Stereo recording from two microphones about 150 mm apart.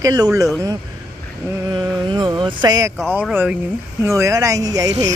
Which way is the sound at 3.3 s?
15° right (ahead or behind).